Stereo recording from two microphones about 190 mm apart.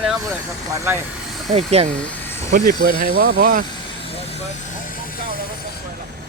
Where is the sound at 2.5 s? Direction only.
50° right (ahead or behind).